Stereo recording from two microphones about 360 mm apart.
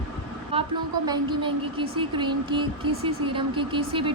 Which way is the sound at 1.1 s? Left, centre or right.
Centre.